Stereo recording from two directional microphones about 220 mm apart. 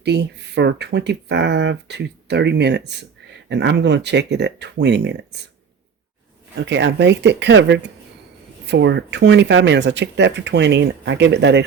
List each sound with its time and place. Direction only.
0.0 s speech: 50° right (ahead or behind)
6.6 s speech: 55° right (ahead or behind)